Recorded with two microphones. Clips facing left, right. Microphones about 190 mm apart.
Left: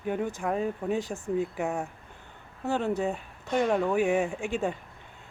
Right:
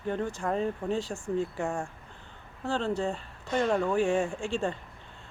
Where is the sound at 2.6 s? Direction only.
20° left (ahead or behind); by 4.4 s 5° left (ahead or behind).